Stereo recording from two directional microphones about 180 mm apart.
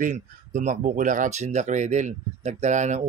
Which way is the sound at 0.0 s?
45° right (ahead or behind).